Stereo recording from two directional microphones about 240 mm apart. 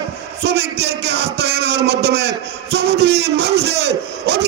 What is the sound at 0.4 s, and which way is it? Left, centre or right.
A man's voice, right.